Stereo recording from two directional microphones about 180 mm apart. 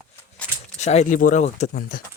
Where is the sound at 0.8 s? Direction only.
40° left (ahead or behind).